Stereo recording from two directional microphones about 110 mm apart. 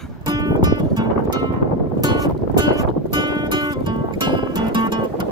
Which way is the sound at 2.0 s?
35° right (ahead or behind).